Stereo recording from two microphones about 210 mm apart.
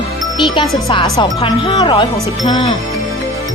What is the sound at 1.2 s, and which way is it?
Speech, 20° left (ahead or behind).